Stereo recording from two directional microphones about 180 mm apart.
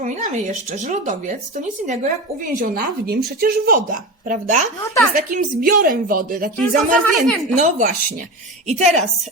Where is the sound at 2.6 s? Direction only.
50° right (ahead or behind).